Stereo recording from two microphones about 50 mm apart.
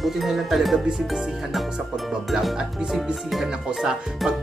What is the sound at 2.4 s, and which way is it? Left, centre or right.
Music, centre.